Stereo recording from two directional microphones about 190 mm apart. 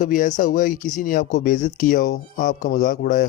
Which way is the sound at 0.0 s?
45° left (ahead or behind).